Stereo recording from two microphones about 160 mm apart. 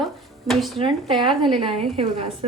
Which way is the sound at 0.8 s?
35° right (ahead or behind).